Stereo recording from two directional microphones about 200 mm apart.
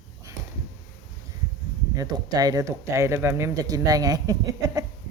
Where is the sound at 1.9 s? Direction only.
20° right (ahead or behind).